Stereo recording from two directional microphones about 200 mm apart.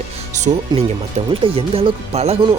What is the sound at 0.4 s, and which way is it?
Music, 35° right (ahead or behind).